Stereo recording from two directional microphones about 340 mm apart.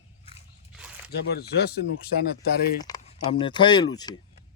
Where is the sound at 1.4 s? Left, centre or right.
Left.